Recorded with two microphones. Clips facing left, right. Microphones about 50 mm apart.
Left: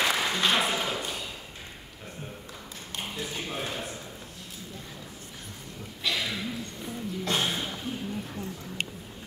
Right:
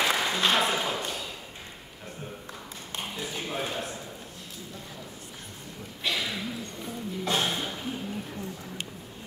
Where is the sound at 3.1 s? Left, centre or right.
Centre.